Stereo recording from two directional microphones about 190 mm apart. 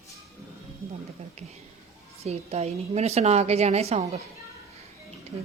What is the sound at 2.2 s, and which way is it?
A woman's voice, 35° right (ahead or behind).